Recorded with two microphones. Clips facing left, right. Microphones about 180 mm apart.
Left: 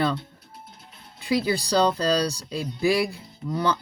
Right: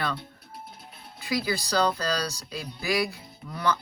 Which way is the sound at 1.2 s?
25° left (ahead or behind).